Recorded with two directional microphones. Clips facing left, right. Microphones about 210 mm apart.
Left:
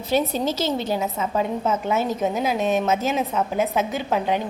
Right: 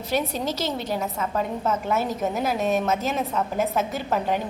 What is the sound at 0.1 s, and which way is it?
Speech, 25° left (ahead or behind).